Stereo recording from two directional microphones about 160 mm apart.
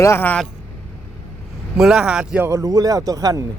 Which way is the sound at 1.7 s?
5° right (ahead or behind).